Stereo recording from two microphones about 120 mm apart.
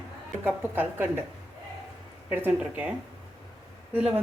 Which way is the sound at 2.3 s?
15° right (ahead or behind).